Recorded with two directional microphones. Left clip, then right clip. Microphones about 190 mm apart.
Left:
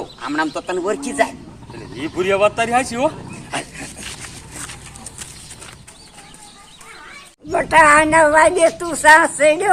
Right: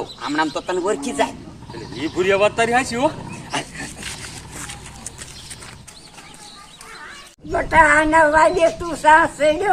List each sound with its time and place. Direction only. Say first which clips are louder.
0.2 s speech: even; 5° right (ahead or behind)
2.0 s speech: left 1 dB; 20° left (ahead or behind)
3.5 s dog: even; 20° left (ahead or behind)
7.5 s a woman's voice: left 3 dB; 15° left (ahead or behind)